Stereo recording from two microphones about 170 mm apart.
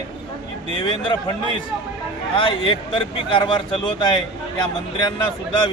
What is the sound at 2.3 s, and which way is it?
Speech, 30° left (ahead or behind).